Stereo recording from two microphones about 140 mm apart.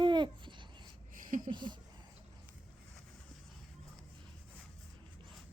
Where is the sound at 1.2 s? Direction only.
70° right (ahead or behind).